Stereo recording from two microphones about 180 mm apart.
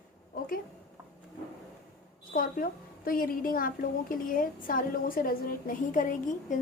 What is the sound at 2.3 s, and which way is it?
A woman's voice, 50° left (ahead or behind).